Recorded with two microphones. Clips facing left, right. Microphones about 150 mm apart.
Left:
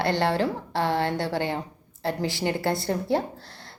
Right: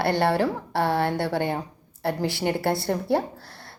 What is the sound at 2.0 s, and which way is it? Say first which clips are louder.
Speech: right 2 dB; 20° left (ahead or behind).